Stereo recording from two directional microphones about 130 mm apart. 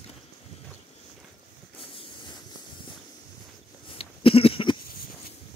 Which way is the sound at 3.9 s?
45° left (ahead or behind).